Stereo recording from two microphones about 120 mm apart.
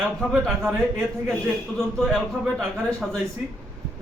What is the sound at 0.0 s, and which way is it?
Speech, 5° left (ahead or behind).